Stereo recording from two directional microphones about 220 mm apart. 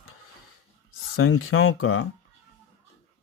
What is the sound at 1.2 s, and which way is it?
Speech, 70° left (ahead or behind).